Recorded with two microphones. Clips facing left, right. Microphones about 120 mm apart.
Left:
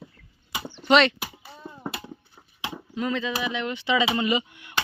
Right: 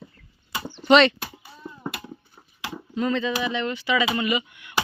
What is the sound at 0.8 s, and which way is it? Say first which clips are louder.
Clip-clop: right 3 dB; centre (ahead or behind).